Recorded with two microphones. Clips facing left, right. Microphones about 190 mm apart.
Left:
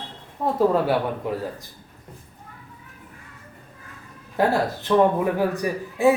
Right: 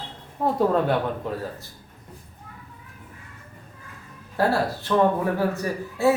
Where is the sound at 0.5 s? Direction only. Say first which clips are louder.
Left 2 dB; 5° left (ahead or behind).